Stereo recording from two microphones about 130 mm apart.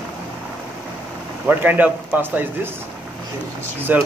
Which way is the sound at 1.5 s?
15° right (ahead or behind).